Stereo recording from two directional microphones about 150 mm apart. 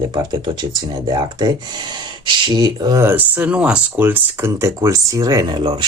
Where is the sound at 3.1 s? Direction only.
10° right (ahead or behind).